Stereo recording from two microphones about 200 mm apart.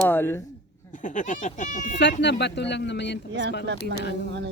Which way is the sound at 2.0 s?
60° left (ahead or behind).